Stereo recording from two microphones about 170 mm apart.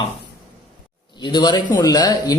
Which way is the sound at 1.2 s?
25° left (ahead or behind).